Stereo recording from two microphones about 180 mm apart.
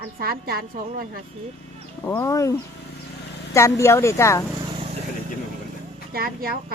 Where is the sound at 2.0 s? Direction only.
15° left (ahead or behind).